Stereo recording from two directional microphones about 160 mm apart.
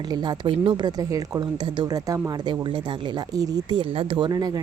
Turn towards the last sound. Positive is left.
turn(degrees=-25)  # may be behind; listen again after turning